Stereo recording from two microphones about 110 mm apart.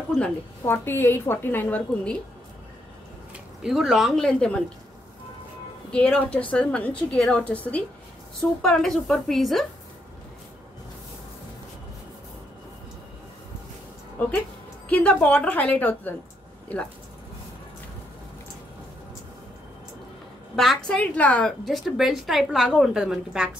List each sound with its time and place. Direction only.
0.7 s a woman's voice: 20° left (ahead or behind)
3.6 s a woman's voice: centre (ahead or behind)
5.9 s a woman's voice: 10° left (ahead or behind)
14.9 s a woman's voice: 15° left (ahead or behind)
20.5 s a woman's voice: 5° left (ahead or behind)
21.6 s a woman's voice: centre (ahead or behind)